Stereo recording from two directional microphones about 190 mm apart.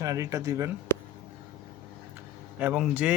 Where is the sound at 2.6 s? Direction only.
5° right (ahead or behind).